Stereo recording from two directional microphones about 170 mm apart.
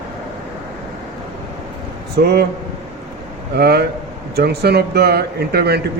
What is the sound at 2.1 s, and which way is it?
Speech, 70° right (ahead or behind).